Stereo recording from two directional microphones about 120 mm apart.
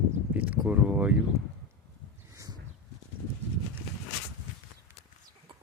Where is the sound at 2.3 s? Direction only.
30° right (ahead or behind).